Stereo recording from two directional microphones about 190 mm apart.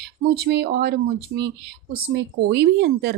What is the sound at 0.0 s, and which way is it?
A woman's voice, 60° right (ahead or behind).